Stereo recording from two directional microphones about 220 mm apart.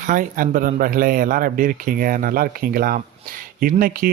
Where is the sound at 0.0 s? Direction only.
35° right (ahead or behind).